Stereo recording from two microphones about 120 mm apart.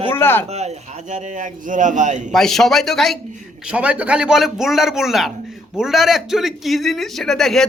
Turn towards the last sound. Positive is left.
turn(degrees=5)  # may be behind; listen again after turning